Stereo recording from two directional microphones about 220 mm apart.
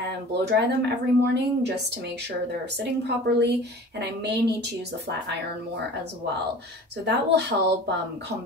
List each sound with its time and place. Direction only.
0.3 s speech: 50° right (ahead or behind)
2.8 s speech: 50° right (ahead or behind)
7.1 s speech: 50° right (ahead or behind)